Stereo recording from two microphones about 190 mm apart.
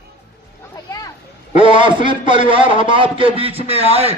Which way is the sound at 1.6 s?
25° right (ahead or behind).